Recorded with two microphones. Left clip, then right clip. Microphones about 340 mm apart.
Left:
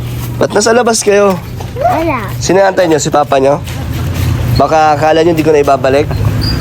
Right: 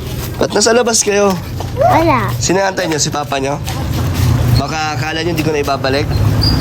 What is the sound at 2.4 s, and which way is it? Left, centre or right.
Speech, centre.